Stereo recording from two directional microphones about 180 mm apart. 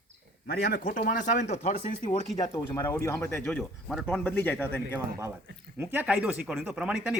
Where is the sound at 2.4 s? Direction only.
15° left (ahead or behind).